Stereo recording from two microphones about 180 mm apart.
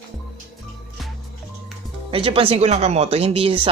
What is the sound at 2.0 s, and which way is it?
Speech, 30° right (ahead or behind).